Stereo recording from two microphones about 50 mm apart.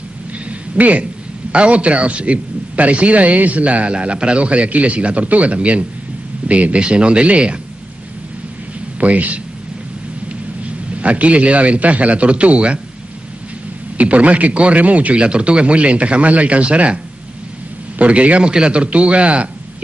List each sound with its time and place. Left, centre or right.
0.5 s a sound: right
1.5 s a man's voice: right
9.0 s a man's voice: right
11.0 s a man's voice: right
13.9 s a man's voice: right